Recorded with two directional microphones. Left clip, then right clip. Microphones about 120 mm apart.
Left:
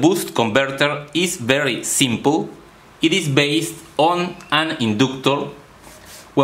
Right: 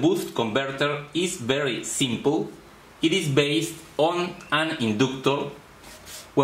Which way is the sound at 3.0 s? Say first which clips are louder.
Left 5 dB; 35° left (ahead or behind).